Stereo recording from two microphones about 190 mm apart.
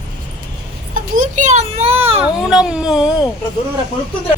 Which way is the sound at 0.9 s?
40° right (ahead or behind).